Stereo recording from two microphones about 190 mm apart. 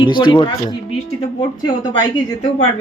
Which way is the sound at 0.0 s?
25° left (ahead or behind).